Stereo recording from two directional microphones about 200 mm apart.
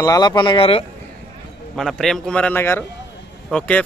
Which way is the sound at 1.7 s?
Centre (ahead or behind).